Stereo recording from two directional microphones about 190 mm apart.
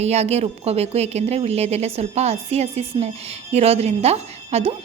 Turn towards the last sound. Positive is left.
turn(degrees=-35)  # may be behind; listen again after turning